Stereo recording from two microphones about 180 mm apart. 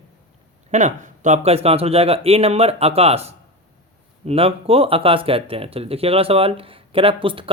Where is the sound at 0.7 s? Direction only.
40° right (ahead or behind).